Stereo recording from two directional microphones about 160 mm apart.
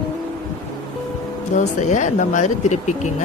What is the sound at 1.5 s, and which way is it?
Speech, 50° left (ahead or behind).